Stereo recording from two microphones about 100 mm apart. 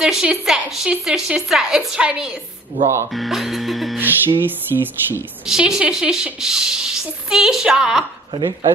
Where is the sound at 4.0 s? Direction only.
20° right (ahead or behind).